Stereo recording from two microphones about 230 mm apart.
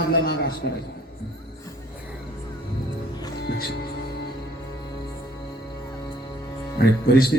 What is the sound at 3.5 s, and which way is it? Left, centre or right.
Music, left.